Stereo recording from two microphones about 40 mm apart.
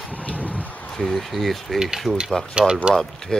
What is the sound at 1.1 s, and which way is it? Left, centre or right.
Speech, centre.